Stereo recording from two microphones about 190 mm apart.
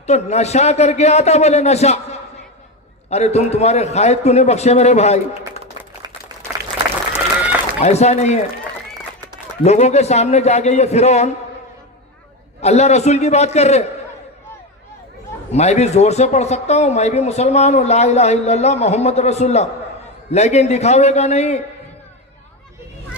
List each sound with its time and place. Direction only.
0.0 s speech: 35° left (ahead or behind)
7.8 s speech: 35° left (ahead or behind)
9.6 s speech: 35° left (ahead or behind)
12.6 s speech: 35° left (ahead or behind)
15.5 s speech: 35° left (ahead or behind)